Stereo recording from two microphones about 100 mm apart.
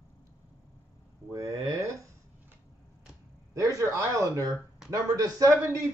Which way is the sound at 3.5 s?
35° right (ahead or behind).